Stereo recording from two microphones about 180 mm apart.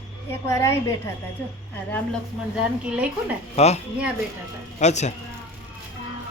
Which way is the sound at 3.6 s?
35° left (ahead or behind).